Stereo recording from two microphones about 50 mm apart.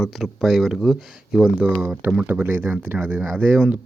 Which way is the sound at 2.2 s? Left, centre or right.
Right.